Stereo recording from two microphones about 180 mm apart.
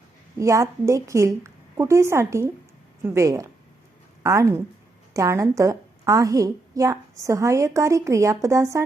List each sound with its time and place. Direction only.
0.3 s a woman's voice: 15° right (ahead or behind)